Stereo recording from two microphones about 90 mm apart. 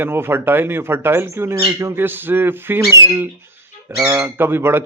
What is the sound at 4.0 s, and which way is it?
Speech, 30° right (ahead or behind).